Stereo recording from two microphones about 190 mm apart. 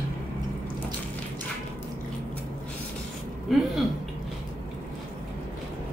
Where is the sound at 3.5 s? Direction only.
Centre (ahead or behind).